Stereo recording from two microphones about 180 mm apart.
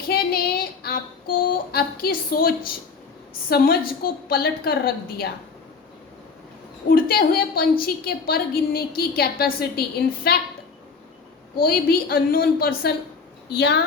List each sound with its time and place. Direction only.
0.1 s child singing: 60° left (ahead or behind)
1.5 s a woman's voice: 55° left (ahead or behind)
3.5 s a woman's voice: 55° left (ahead or behind)
6.8 s a woman's voice: 55° left (ahead or behind)
11.5 s a woman's voice: 55° left (ahead or behind)